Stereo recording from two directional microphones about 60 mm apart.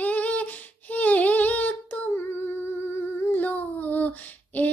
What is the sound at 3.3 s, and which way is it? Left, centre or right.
Child singing, left.